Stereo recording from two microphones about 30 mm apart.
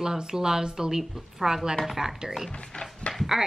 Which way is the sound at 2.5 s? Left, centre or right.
Left.